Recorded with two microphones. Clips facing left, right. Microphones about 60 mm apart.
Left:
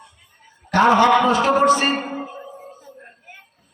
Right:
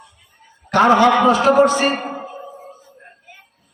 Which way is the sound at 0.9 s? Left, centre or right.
Left.